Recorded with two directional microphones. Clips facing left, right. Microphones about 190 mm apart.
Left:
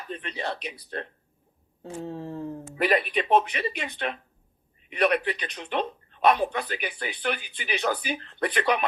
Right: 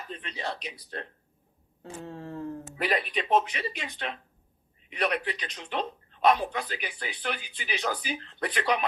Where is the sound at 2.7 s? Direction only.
60° left (ahead or behind).